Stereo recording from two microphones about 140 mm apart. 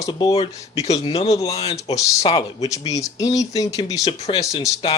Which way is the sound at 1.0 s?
45° left (ahead or behind).